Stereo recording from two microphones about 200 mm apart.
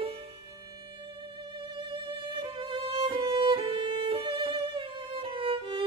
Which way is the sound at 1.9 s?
25° right (ahead or behind).